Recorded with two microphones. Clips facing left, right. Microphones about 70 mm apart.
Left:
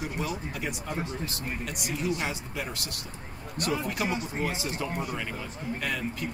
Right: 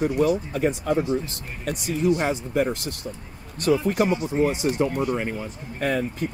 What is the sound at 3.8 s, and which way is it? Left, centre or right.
Speech, right.